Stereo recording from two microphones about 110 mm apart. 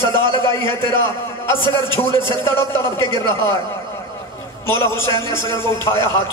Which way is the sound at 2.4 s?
25° left (ahead or behind).